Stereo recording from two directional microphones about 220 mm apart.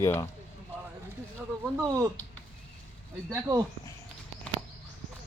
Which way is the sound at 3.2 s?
15° right (ahead or behind).